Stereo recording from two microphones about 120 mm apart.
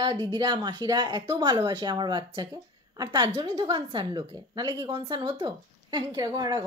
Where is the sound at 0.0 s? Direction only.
35° right (ahead or behind).